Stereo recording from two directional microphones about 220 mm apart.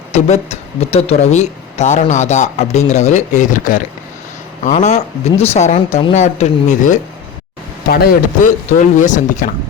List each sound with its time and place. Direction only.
0.1 s speech: 30° left (ahead or behind)